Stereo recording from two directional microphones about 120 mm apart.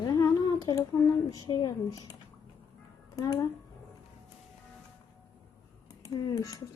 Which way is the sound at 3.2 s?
35° left (ahead or behind).